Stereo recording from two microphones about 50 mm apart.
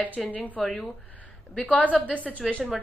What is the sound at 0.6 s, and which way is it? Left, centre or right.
Speech, centre.